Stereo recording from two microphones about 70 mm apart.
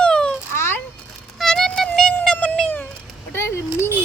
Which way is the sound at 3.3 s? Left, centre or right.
Left.